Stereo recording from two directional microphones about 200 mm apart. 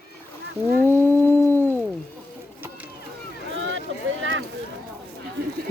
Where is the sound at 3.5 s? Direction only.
70° right (ahead or behind).